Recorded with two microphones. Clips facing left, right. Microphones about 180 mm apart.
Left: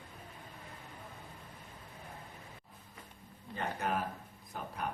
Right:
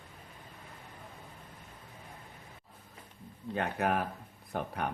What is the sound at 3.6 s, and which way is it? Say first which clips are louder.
Speech: right 4 dB; 65° right (ahead or behind).